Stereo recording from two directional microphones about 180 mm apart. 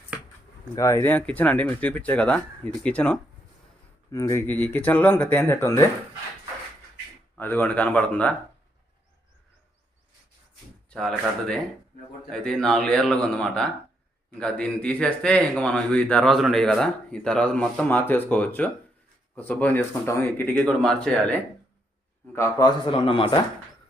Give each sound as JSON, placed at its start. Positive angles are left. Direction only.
{"t": 0.8, "sound": "speech", "side_deg": 15}
{"t": 7.3, "sound": "speech", "side_deg": 10}
{"t": 10.8, "sound": "a man's voice", "side_deg": 5}
{"t": 22.9, "sound": "a man's voice", "side_deg": 30}